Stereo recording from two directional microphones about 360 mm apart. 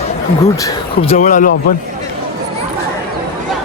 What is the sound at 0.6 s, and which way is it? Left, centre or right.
Speech, centre.